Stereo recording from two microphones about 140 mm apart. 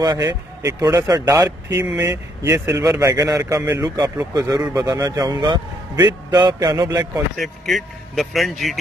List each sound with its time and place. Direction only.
0.0 s speech: 30° right (ahead or behind)
7.3 s speech: centre (ahead or behind)